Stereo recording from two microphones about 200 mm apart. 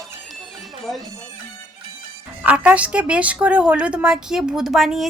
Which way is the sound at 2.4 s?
5° right (ahead or behind).